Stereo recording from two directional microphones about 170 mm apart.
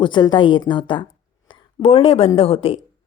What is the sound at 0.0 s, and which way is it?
A woman's voice, 25° left (ahead or behind).